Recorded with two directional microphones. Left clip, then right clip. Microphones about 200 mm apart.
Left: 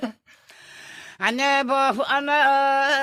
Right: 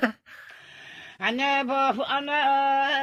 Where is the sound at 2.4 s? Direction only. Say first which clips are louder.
Left 1 dB; 65° left (ahead or behind).